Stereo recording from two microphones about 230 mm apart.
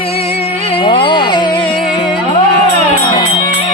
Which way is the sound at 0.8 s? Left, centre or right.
Left.